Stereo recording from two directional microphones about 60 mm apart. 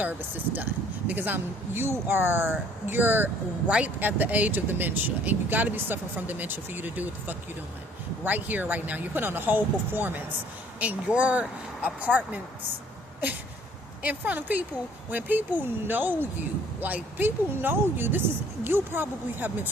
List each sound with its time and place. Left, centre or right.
0.0 s speech: right
3.7 s speech: right
14.0 s speech: right